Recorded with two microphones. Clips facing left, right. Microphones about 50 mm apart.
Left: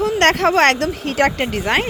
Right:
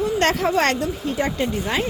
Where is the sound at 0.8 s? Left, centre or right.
Left.